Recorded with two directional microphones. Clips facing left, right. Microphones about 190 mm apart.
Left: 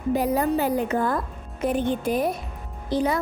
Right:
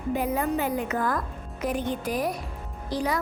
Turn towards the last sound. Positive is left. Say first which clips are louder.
# left 4 dB
turn(degrees=25)  # may be behind; listen again after turning